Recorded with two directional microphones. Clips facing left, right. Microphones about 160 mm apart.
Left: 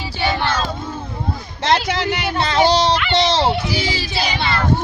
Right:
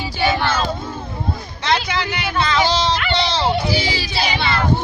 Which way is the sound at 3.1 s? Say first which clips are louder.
Left 3 dB; 90° left.